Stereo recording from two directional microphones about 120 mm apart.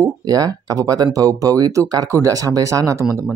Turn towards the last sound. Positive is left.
turn(degrees=-25)  # may be behind; listen again after turning